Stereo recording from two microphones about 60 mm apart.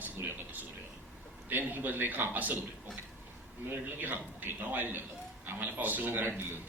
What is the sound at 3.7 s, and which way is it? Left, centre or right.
A man's voice, right.